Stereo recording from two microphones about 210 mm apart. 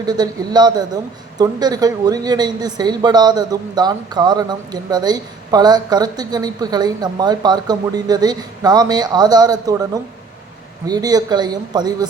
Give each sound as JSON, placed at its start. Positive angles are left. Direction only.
{"t": 0.0, "sound": "a woman's voice", "side_deg": -20}